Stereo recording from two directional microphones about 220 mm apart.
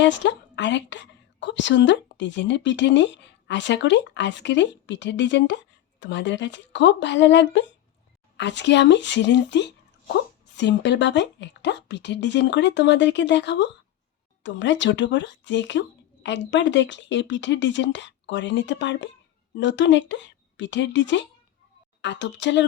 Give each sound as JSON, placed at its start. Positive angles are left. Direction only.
{"t": 0.0, "sound": "a woman's voice", "side_deg": 55}